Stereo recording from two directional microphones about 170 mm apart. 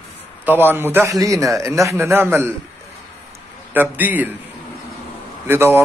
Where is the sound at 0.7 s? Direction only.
10° right (ahead or behind).